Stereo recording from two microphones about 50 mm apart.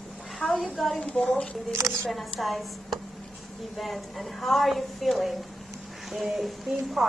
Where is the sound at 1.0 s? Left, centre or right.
Left.